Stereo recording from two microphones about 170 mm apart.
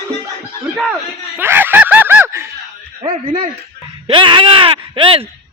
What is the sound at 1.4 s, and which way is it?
Snicker, 10° right (ahead or behind).